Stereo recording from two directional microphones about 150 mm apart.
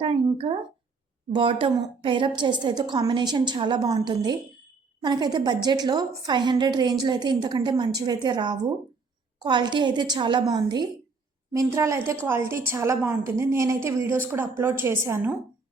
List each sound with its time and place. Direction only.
0.3 s a woman's voice: 35° right (ahead or behind); by 15.3 s 15° right (ahead or behind)